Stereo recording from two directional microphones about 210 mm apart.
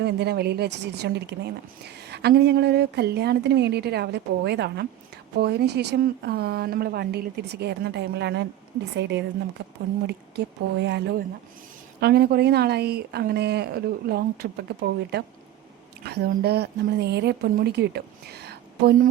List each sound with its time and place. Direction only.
0.0 s a woman's voice: 50° right (ahead or behind)